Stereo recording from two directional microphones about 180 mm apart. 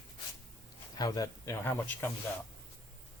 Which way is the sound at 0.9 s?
20° left (ahead or behind).